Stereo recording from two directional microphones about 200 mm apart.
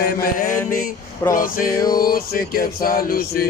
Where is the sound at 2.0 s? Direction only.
45° left (ahead or behind).